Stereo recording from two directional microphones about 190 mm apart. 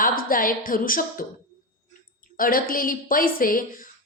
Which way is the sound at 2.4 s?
50° left (ahead or behind).